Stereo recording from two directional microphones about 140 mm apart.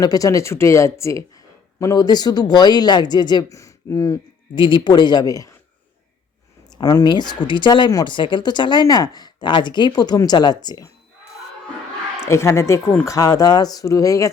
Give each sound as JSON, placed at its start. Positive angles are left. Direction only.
{"t": 0.0, "sound": "speech", "side_deg": 25}
{"t": 4.5, "sound": "speech", "side_deg": 35}
{"t": 6.7, "sound": "speech", "side_deg": 30}
{"t": 12.2, "sound": "speech", "side_deg": 20}